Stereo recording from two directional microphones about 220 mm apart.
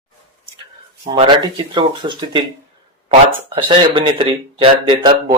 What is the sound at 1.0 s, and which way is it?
Speech, 25° right (ahead or behind).